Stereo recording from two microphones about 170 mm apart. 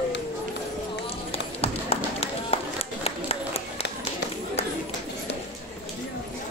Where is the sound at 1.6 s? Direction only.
35° left (ahead or behind).